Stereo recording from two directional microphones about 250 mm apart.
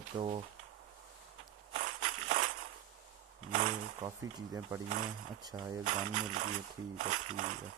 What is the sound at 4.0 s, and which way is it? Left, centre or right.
Speech, centre.